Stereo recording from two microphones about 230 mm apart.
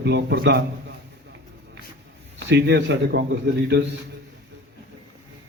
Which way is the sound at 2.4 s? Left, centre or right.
Right.